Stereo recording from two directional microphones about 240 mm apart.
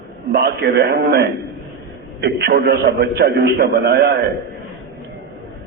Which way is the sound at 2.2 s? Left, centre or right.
Right.